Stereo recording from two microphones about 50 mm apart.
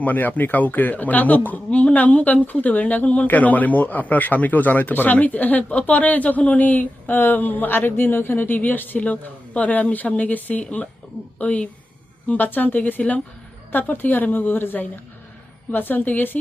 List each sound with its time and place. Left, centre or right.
0.0 s a woman's voice: left
12.5 s speech: left